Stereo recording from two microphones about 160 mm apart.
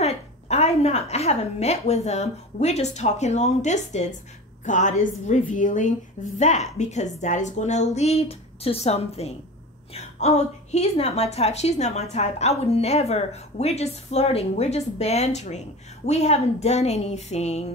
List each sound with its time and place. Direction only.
0.0 s a woman's voice: 40° left (ahead or behind)